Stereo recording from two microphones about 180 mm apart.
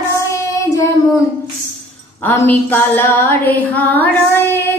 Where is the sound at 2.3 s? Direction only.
10° left (ahead or behind).